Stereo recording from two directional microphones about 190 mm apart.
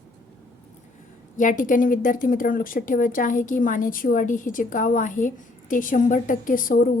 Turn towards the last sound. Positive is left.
turn(degrees=45)  # may be behind; listen again after turning